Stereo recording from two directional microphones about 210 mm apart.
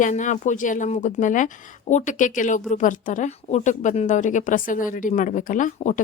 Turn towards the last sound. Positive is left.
turn(degrees=35)  # may be behind; listen again after turning